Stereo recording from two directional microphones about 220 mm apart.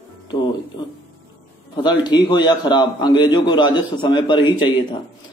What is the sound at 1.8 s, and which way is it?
A man's voice, 20° left (ahead or behind).